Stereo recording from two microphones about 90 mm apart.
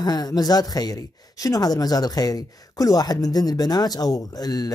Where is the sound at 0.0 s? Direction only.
50° left (ahead or behind).